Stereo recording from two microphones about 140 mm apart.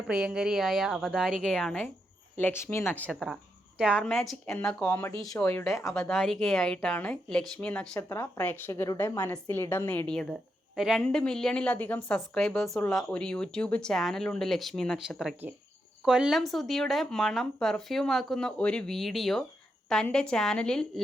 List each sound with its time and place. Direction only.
0.1 s a woman's voice: 5° right (ahead or behind); by 3.0 s 15° left (ahead or behind)
3.1 s a woman's voice: centre (ahead or behind); by 5.8 s 20° left (ahead or behind)
5.8 s a woman's voice: 5° left (ahead or behind)